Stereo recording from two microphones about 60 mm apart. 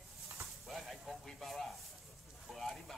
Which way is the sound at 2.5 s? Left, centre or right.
Centre.